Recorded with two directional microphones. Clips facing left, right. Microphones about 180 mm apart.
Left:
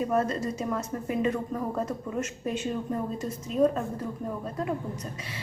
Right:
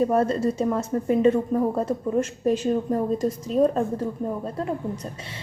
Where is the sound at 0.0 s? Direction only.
30° right (ahead or behind).